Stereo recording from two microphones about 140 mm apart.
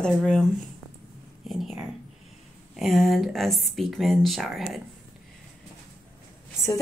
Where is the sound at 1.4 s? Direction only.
Centre (ahead or behind).